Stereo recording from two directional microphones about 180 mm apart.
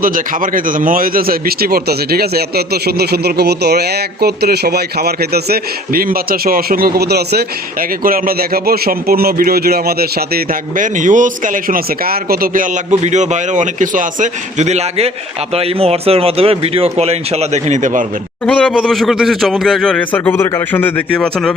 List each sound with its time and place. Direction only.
0.0 s a man's voice: 50° right (ahead or behind)
13.0 s speech: 40° right (ahead or behind)
18.4 s speech: 5° left (ahead or behind)